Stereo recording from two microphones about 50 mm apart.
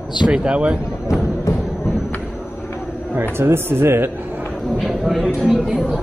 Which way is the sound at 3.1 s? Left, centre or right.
Right.